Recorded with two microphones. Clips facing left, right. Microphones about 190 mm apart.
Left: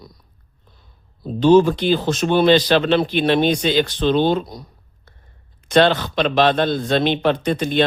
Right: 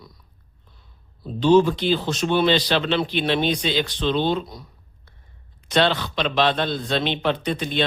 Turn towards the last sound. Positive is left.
turn(degrees=45)  # may be behind; listen again after turning